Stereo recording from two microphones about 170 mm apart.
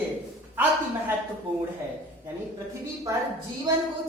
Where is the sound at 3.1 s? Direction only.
20° right (ahead or behind).